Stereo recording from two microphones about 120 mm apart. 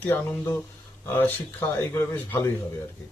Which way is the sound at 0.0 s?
20° left (ahead or behind).